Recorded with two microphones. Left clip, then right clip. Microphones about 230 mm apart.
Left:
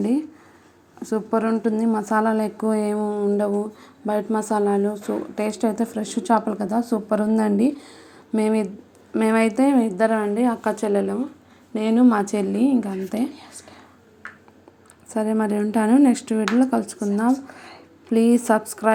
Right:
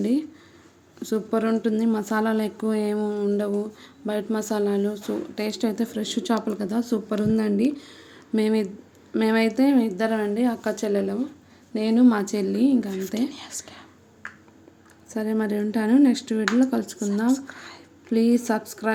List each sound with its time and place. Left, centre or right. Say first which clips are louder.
1.0 s speech: left 2 dB; centre
13.3 s speech: right 4 dB; right
15.1 s speech: left 4 dB; centre
18.1 s speech: left 4 dB; centre